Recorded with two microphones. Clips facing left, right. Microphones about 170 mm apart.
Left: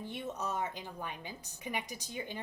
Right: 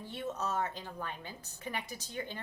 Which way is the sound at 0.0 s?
15° left (ahead or behind).